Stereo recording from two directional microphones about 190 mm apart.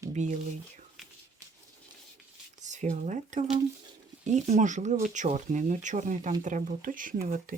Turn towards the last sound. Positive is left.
turn(degrees=-45)  # may be behind; listen again after turning